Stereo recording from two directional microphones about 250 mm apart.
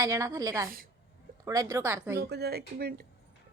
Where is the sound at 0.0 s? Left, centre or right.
Centre.